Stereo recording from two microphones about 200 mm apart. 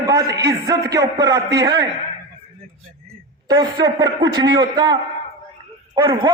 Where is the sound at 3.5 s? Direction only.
20° right (ahead or behind).